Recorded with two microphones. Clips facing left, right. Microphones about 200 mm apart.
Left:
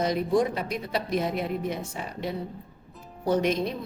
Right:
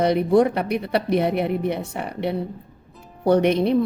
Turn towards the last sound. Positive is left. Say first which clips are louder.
# right 7 dB
turn(degrees=-65)  # may be behind; listen again after turning